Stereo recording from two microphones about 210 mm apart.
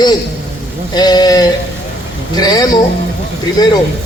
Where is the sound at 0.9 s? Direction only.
20° left (ahead or behind).